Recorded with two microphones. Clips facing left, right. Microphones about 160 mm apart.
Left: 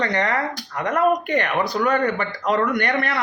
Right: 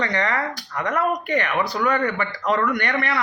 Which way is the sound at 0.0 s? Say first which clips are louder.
Left 2 dB; 45° left (ahead or behind).